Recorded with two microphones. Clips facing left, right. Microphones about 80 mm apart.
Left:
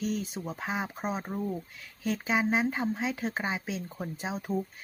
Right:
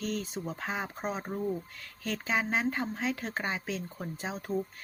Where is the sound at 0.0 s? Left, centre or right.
Centre.